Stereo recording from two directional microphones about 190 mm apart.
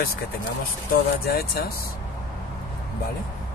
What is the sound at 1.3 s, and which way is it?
Speech, 55° left (ahead or behind).